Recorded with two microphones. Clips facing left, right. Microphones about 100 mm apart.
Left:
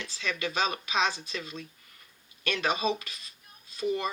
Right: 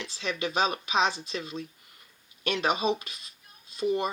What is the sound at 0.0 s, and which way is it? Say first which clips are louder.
Speech: right 2 dB; 30° right (ahead or behind).